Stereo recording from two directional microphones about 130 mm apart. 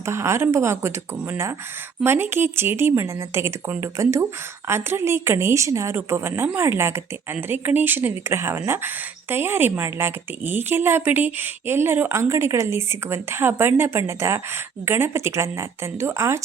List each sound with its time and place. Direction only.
0.0 s a woman's voice: 20° right (ahead or behind)